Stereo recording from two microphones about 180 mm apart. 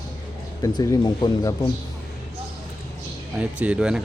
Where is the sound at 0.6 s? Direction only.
20° left (ahead or behind).